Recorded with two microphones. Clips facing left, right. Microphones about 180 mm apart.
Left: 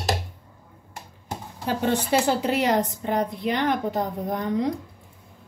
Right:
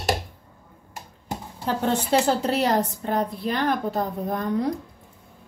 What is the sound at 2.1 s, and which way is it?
A woman's voice, 15° left (ahead or behind).